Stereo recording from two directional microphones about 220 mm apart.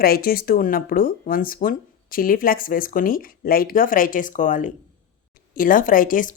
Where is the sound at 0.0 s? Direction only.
45° left (ahead or behind).